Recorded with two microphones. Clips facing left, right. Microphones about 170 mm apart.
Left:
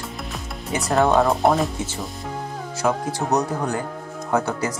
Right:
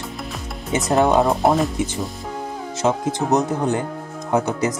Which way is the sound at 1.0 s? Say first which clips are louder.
Even; centre (ahead or behind).